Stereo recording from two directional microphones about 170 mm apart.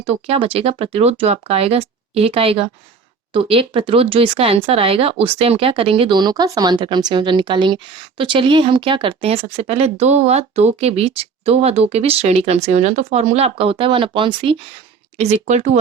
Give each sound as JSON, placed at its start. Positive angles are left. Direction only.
{"t": 0.0, "sound": "speech", "side_deg": -35}
{"t": 15.2, "sound": "speech", "side_deg": -40}